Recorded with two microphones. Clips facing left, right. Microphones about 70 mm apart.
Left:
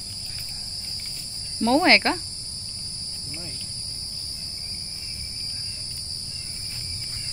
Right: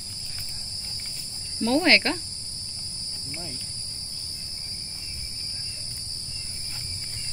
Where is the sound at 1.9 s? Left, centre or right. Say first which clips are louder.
Left 1 dB; left.